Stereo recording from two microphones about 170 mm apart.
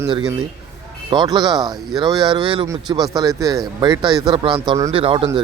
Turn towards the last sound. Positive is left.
turn(degrees=-30)  # may be behind; listen again after turning